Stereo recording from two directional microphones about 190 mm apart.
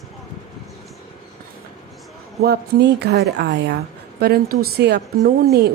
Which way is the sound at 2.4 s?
60° right (ahead or behind).